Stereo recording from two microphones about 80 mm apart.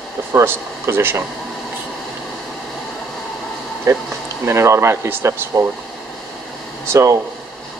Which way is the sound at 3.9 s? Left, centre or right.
Right.